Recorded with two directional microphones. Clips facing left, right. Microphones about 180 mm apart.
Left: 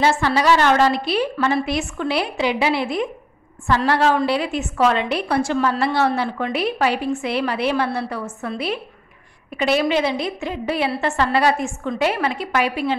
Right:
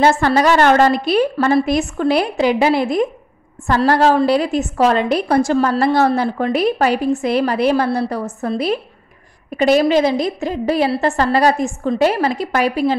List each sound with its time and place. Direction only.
0.0 s a woman's voice: 50° right (ahead or behind)